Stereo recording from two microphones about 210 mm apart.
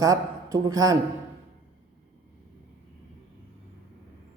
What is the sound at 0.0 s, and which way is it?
Speech, 15° right (ahead or behind).